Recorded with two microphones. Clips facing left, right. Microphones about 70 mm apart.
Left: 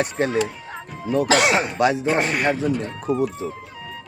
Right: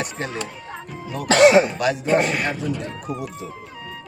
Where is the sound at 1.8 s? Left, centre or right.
Left.